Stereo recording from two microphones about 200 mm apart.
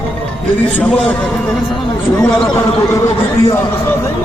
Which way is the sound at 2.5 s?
15° left (ahead or behind).